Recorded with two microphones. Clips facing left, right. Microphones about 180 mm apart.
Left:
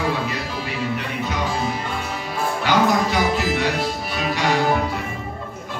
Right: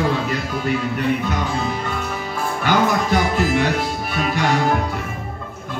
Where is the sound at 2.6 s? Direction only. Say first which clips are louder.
Right 1 dB; 50° right (ahead or behind).